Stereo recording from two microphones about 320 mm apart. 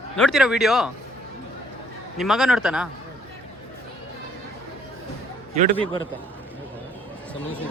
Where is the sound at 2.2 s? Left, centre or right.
Centre.